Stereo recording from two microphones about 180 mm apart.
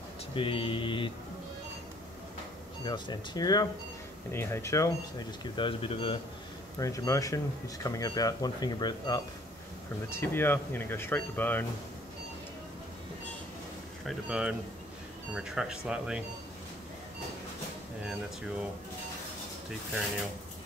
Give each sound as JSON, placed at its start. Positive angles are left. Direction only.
{"t": 0.3, "sound": "speech", "side_deg": 30}
{"t": 2.8, "sound": "speech", "side_deg": 25}
{"t": 5.4, "sound": "speech", "side_deg": 30}
{"t": 6.8, "sound": "speech", "side_deg": 20}
{"t": 10.0, "sound": "speech", "side_deg": 10}
{"t": 14.0, "sound": "speech", "side_deg": -5}